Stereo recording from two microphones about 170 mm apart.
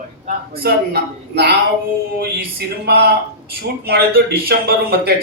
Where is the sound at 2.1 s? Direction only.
70° right (ahead or behind).